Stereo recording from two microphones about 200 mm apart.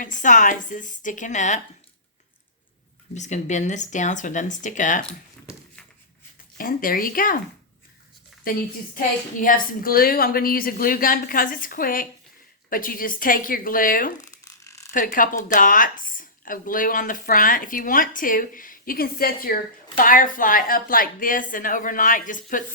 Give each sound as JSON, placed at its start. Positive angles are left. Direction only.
{"t": 0.0, "sound": "speech", "side_deg": 40}
{"t": 3.2, "sound": "speech", "side_deg": 35}
{"t": 6.6, "sound": "speech", "side_deg": 45}
{"t": 8.4, "sound": "speech", "side_deg": 45}
{"t": 14.6, "sound": "zipper", "side_deg": 15}
{"t": 14.9, "sound": "speech", "side_deg": 45}